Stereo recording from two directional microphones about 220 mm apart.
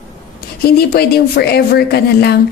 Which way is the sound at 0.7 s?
45° left (ahead or behind).